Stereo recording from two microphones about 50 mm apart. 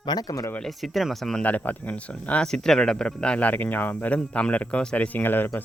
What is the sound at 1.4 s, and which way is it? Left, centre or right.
Speech, left.